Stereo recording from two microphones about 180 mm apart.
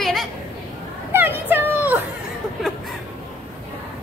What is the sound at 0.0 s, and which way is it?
Chatter, centre (ahead or behind).